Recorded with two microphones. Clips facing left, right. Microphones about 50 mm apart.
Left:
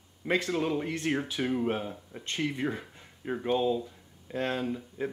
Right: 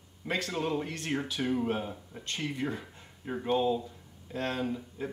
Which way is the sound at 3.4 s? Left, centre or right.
Centre.